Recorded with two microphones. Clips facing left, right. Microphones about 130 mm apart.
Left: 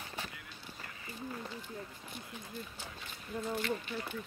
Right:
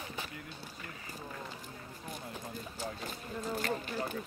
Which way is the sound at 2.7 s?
40° right (ahead or behind).